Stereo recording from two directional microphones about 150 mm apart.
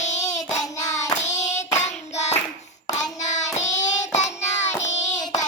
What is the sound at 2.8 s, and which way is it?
Hands, 25° left (ahead or behind).